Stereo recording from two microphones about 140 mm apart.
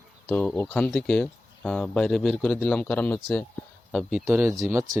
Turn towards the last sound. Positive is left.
turn(degrees=-20)  # may be behind; listen again after turning